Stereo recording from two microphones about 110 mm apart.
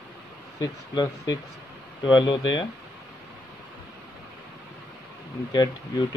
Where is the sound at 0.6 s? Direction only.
35° left (ahead or behind).